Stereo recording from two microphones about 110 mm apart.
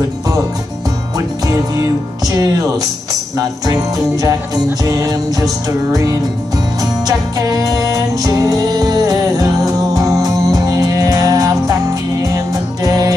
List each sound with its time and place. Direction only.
1.1 s music: 35° right (ahead or behind)